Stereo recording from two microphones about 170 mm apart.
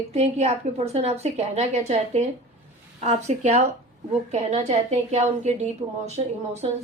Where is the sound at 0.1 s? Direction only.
40° right (ahead or behind).